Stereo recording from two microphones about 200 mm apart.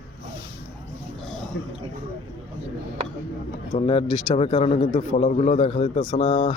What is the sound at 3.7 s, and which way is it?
Speech, 30° left (ahead or behind).